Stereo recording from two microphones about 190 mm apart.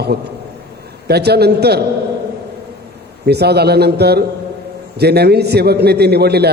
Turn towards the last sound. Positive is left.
turn(degrees=-60)  # may be behind; listen again after turning